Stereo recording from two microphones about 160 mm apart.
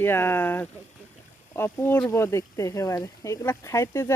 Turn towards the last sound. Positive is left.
turn(degrees=15)  # may be behind; listen again after turning